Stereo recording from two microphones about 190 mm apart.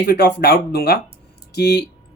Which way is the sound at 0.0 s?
55° left (ahead or behind).